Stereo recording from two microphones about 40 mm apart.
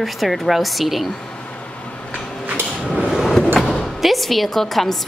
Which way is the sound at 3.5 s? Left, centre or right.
Centre.